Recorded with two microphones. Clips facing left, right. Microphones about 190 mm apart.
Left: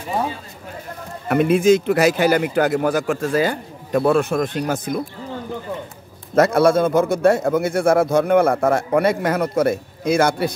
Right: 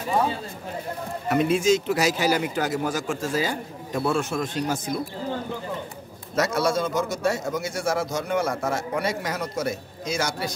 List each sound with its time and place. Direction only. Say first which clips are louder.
1.3 s a man's voice: left 6 dB; 55° left (ahead or behind)
6.3 s a man's voice: left 9 dB; 55° left (ahead or behind)